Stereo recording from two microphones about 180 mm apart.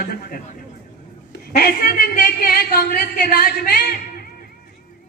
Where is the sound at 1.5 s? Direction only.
55° left (ahead or behind).